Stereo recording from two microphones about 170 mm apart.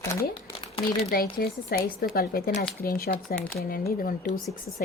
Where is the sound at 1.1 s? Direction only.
65° left (ahead or behind).